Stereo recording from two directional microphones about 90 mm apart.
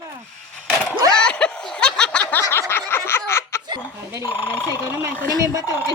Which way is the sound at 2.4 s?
30° left (ahead or behind).